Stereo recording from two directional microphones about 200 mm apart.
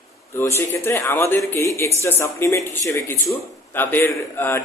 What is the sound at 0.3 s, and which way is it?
Speech, 15° left (ahead or behind).